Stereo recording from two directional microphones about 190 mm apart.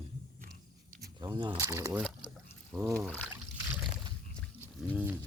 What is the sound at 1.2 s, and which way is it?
Speech, 20° right (ahead or behind).